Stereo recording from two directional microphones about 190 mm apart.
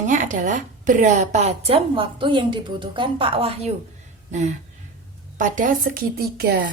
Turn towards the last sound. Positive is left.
turn(degrees=-55)  # may be behind; listen again after turning